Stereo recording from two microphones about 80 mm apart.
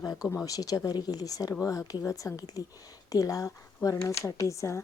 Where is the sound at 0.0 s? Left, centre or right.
Left.